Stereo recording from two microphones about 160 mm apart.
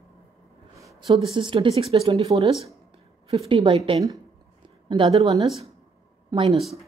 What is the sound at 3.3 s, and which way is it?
Speech, 35° right (ahead or behind).